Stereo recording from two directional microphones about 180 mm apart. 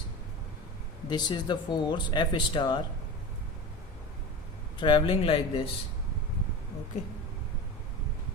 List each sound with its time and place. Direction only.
1.0 s speech: 25° left (ahead or behind)
4.8 s speech: 25° left (ahead or behind)